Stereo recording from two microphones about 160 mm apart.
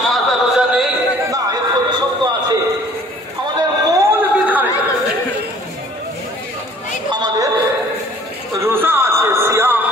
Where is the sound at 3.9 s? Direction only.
10° right (ahead or behind).